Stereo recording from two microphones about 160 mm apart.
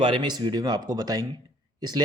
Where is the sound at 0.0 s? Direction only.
30° right (ahead or behind).